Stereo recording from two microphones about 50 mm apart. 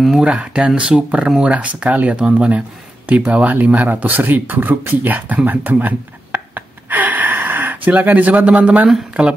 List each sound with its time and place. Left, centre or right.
0.2 s speech: right